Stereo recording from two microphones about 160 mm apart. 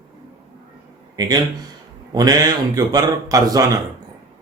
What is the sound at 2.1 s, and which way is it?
A man's voice, 25° right (ahead or behind).